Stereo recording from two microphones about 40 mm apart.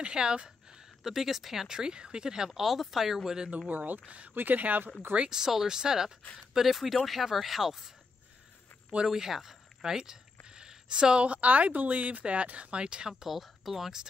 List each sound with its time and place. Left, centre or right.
0.0 s a sound: right
1.0 s speech: centre
1.7 s speech: centre
2.6 s speech: centre
3.4 s speech: right
3.7 s speech: right
4.1 s speech: right
4.4 s speech: right
5.3 s speech: centre
9.0 s speech: centre
10.4 s a sound: centre
11.4 s speech: right
13.2 s speech: centre